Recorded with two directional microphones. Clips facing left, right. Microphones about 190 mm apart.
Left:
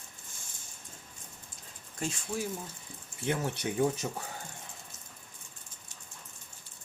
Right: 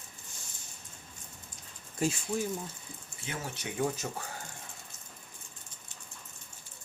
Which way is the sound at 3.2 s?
60° left (ahead or behind).